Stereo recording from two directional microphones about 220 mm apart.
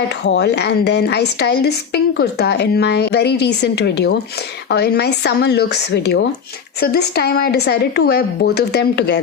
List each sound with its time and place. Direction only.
0.3 s a woman's voice: 50° left (ahead or behind)